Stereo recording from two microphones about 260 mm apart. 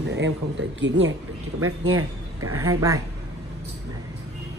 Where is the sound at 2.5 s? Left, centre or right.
Centre.